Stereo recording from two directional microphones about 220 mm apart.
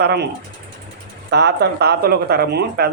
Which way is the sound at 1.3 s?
50° right (ahead or behind).